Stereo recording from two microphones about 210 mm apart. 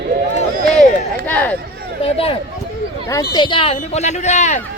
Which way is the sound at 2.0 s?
25° left (ahead or behind).